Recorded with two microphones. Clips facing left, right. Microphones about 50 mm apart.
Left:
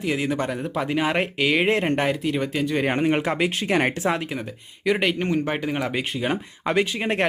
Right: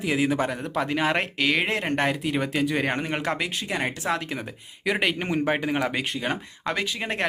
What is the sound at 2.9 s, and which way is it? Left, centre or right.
Speech, centre.